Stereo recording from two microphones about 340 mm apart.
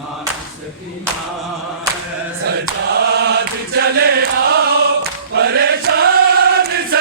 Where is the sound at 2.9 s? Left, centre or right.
Right.